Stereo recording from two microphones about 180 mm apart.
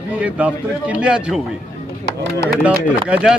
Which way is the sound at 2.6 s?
10° right (ahead or behind).